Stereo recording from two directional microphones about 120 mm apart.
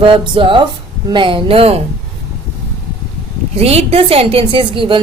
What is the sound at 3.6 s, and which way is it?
A woman's voice, 60° right (ahead or behind).